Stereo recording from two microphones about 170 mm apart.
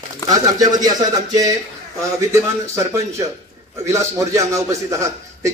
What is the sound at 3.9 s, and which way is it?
A man's voice, 15° right (ahead or behind).